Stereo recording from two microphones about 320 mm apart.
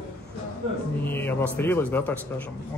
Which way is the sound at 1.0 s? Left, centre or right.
Centre.